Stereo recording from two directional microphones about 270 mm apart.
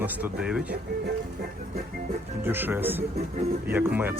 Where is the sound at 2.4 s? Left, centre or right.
Centre.